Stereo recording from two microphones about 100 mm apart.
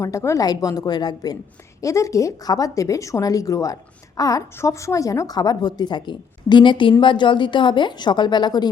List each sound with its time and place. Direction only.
0.0 s a woman's voice: 30° left (ahead or behind)
1.8 s a woman's voice: 30° left (ahead or behind)